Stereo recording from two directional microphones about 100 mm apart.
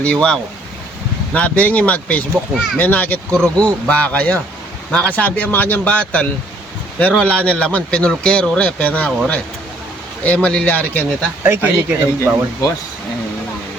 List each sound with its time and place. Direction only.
0.0 s speech: 10° left (ahead or behind)
11.4 s a man's voice: 20° right (ahead or behind)